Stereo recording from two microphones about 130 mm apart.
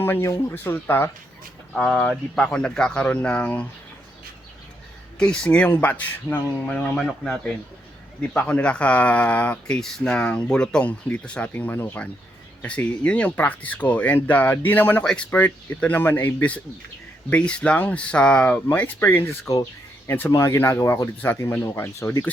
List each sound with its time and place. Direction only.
0.0 s speech: 20° left (ahead or behind)
1.7 s speech: 5° left (ahead or behind)
5.2 s speech: 5° left (ahead or behind)